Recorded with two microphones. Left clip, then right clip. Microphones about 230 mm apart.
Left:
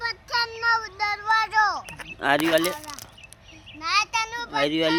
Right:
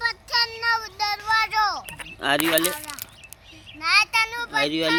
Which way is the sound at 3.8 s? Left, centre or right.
Centre.